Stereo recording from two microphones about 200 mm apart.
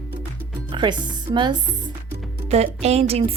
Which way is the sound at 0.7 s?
25° right (ahead or behind).